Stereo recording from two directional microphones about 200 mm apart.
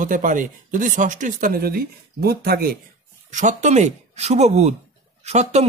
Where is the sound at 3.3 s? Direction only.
35° right (ahead or behind).